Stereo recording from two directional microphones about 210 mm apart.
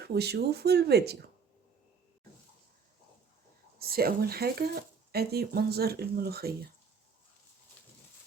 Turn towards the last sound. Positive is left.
turn(degrees=-50)  # may be behind; listen again after turning